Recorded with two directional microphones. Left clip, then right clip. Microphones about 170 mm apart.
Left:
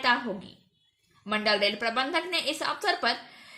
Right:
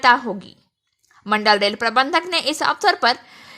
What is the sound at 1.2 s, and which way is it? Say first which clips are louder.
A woman's voice: right 9 dB; 55° right (ahead or behind).